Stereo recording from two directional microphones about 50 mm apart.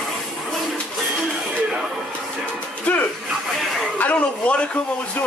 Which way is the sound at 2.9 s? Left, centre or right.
Left.